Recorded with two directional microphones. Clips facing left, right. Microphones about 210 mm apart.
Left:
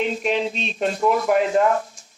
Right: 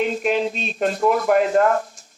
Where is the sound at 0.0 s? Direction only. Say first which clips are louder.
Right 2 dB; 5° right (ahead or behind).